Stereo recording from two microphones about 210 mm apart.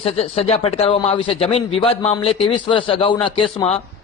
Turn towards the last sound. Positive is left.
turn(degrees=25)  # may be behind; listen again after turning